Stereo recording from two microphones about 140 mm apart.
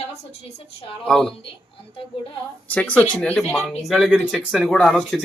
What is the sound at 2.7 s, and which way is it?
Speech, 10° left (ahead or behind).